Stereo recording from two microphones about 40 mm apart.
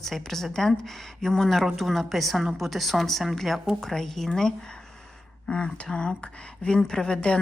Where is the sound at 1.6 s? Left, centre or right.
Centre.